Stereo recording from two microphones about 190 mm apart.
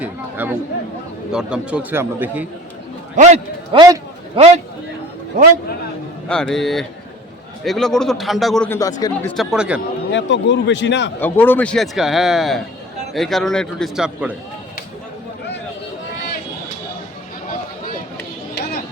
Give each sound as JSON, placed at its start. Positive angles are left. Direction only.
{"t": 0.0, "sound": "chatter", "side_deg": -10}
{"t": 1.3, "sound": "a man's voice", "side_deg": -5}
{"t": 3.2, "sound": "a man's voice", "side_deg": -35}
{"t": 3.8, "sound": "a man's voice", "side_deg": -15}
{"t": 4.4, "sound": "a man's voice", "side_deg": -35}
{"t": 6.2, "sound": "a man's voice", "side_deg": 5}
{"t": 8.8, "sound": "speech", "side_deg": 20}
{"t": 9.3, "sound": "a man's voice", "side_deg": 0}
{"t": 10.1, "sound": "speech", "side_deg": 70}
{"t": 11.2, "sound": "a man's voice", "side_deg": 10}